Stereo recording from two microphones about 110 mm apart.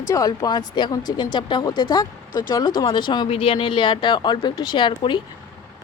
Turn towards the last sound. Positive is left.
turn(degrees=45)  # may be behind; listen again after turning